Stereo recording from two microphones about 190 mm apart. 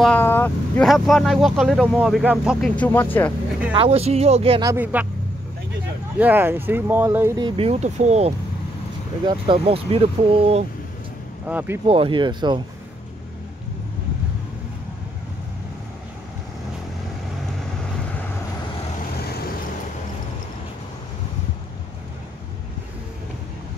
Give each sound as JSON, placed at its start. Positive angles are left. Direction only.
{"t": 0.0, "sound": "vehicle", "side_deg": 10}
{"t": 0.8, "sound": "speech", "side_deg": 0}
{"t": 2.8, "sound": "speech", "side_deg": 10}
{"t": 3.7, "sound": "speech", "side_deg": -30}
{"t": 4.6, "sound": "speech", "side_deg": -10}
{"t": 6.1, "sound": "speech", "side_deg": -10}
{"t": 11.4, "sound": "speech", "side_deg": -10}
{"t": 11.9, "sound": "speech", "side_deg": -30}
{"t": 19.2, "sound": "vehicle", "side_deg": 55}